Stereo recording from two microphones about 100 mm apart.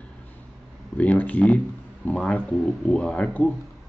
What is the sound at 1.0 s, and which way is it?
Speech, 15° left (ahead or behind).